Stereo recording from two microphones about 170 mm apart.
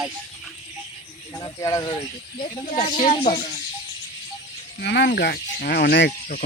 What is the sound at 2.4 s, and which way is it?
Speech, 35° left (ahead or behind).